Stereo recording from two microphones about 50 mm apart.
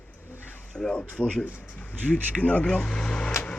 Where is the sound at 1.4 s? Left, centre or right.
Left; by 3.3 s centre.